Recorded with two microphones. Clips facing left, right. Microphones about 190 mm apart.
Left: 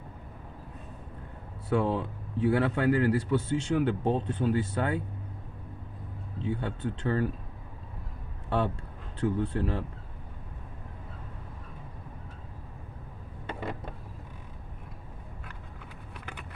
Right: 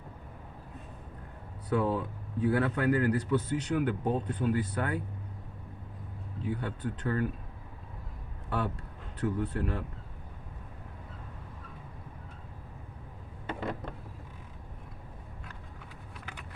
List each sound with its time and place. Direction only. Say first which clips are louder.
1.7 s speech: left 2 dB; 25° left (ahead or behind)
6.4 s speech: left 2 dB; 25° left (ahead or behind)
8.4 s speech: left 4 dB; 25° left (ahead or behind)